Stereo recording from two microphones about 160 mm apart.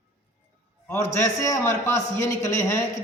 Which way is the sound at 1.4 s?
15° left (ahead or behind).